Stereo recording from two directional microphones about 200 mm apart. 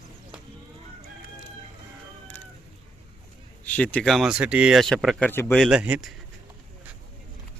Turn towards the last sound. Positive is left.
turn(degrees=-5)  # may be behind; listen again after turning